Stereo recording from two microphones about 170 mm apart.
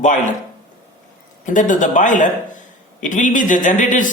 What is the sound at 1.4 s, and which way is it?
Speech, 50° left (ahead or behind).